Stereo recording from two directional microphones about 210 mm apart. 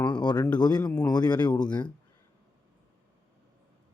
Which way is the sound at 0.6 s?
20° left (ahead or behind).